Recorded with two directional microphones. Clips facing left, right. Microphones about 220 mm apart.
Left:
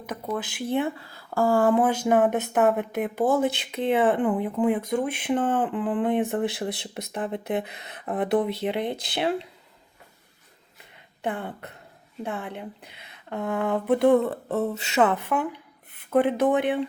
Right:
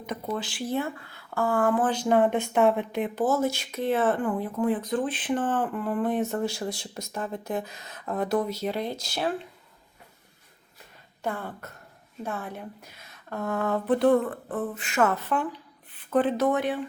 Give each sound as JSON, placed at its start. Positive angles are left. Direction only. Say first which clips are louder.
{"t": 0.0, "sound": "a sound", "louder": "left 1 dB", "side_deg": 5}
{"t": 0.7, "sound": "speech", "louder": "left 4 dB", "side_deg": 20}
{"t": 1.1, "sound": "speech", "louder": "left 4 dB", "side_deg": 35}
{"t": 1.8, "sound": "speech", "louder": "left 2 dB", "side_deg": 10}
{"t": 11.2, "sound": "speech", "louder": "left 2 dB", "side_deg": 20}
{"t": 14.3, "sound": "speech", "louder": "left 5 dB", "side_deg": 25}